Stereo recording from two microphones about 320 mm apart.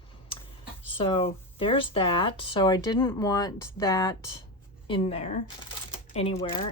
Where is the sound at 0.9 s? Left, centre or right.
Centre.